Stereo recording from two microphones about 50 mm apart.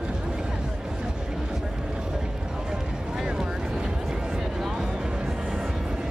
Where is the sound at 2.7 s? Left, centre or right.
Centre.